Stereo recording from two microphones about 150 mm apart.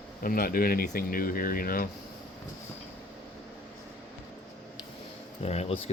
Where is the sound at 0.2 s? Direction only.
75° left (ahead or behind).